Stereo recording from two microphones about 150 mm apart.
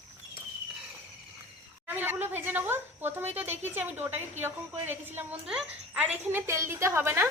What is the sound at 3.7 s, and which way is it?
A woman's voice, 10° right (ahead or behind).